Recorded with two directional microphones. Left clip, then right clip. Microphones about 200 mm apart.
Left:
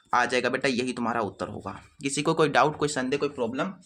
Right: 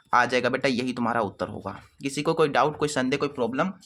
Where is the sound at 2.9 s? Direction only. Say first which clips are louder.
Right 2 dB; 25° right (ahead or behind).